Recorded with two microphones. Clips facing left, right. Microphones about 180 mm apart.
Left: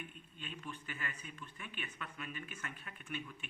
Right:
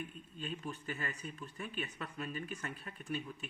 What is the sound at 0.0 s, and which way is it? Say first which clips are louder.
Speech: right 6 dB; 40° right (ahead or behind).